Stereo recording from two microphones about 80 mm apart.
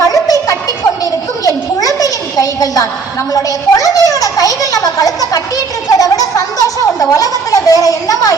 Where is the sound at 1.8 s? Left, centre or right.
Left.